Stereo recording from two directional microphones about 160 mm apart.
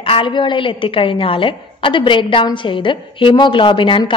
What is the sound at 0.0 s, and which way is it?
A woman's voice, 30° left (ahead or behind).